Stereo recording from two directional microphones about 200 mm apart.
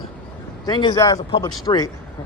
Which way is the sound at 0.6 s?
20° left (ahead or behind).